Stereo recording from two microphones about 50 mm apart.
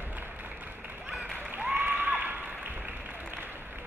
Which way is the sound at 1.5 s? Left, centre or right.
Right.